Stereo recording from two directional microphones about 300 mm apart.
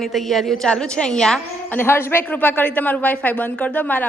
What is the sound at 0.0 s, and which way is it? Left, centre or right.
A woman's voice, centre.